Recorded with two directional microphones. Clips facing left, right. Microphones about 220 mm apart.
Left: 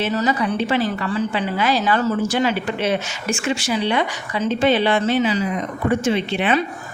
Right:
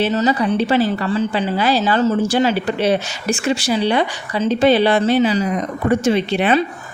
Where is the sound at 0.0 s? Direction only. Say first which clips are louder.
Right 3 dB; 25° right (ahead or behind).